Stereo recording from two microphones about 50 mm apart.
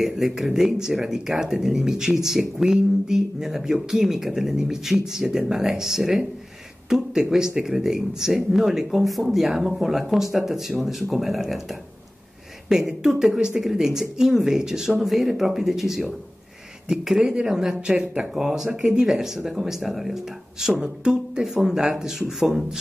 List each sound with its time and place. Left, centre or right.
0.0 s speech: centre
12.6 s speech: centre
20.6 s speech: centre